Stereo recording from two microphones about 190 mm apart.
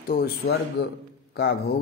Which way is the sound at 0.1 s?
55° left (ahead or behind).